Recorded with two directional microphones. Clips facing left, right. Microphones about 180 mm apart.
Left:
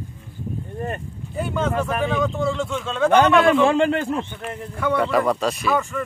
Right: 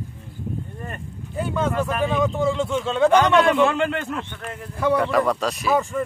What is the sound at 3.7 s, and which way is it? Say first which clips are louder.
Speech: left 4 dB; 35° left (ahead or behind).